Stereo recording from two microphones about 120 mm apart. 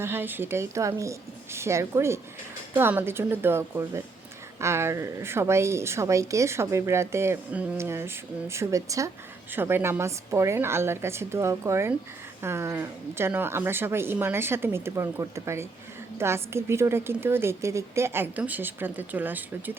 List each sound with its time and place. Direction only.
0.0 s a woman's voice: 20° right (ahead or behind)